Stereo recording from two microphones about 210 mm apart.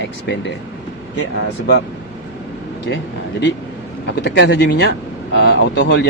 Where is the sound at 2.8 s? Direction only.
60° left (ahead or behind).